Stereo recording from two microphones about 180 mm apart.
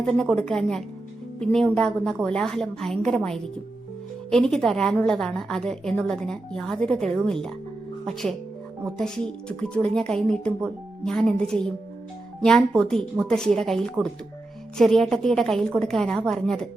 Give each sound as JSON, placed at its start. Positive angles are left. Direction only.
{"t": 0.0, "sound": "a woman's voice", "side_deg": 0}